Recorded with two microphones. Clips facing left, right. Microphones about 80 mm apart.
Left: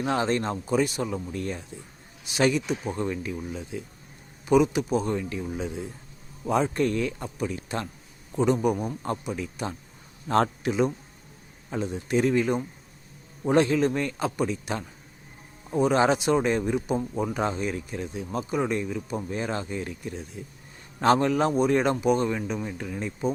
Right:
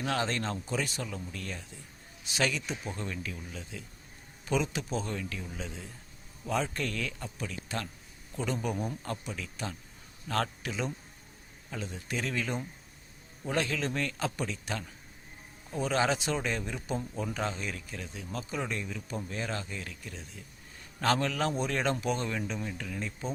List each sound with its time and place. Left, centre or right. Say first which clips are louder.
0.0 s speech: left 6 dB; left